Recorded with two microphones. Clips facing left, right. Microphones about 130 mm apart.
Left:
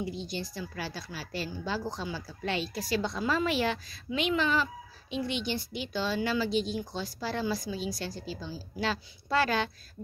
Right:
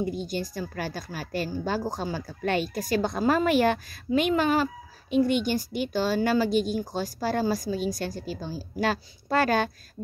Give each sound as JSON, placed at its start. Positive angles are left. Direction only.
{"t": 0.0, "sound": "a woman's voice", "side_deg": -50}